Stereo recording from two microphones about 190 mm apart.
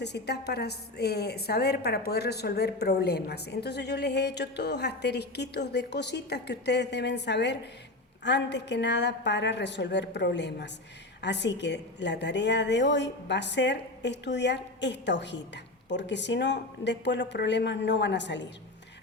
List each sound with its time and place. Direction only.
0.0 s a woman's voice: 60° left (ahead or behind)